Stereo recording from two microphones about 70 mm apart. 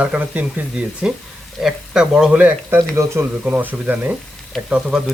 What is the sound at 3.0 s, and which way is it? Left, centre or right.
Speech, right.